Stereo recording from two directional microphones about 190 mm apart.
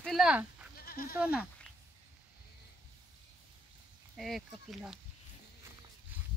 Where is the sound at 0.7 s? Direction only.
50° left (ahead or behind).